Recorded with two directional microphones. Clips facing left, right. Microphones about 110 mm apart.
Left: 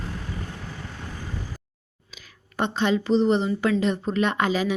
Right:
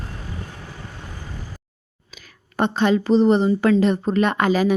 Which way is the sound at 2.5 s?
45° right (ahead or behind).